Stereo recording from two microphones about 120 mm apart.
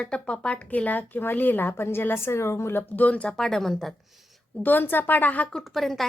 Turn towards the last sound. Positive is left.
turn(degrees=0)  # may be behind; listen again after turning